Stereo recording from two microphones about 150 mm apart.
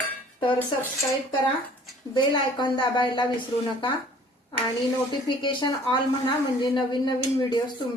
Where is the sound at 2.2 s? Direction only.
30° left (ahead or behind).